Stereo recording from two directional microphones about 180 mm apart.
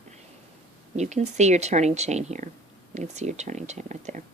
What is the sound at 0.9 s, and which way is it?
Speech, 40° right (ahead or behind).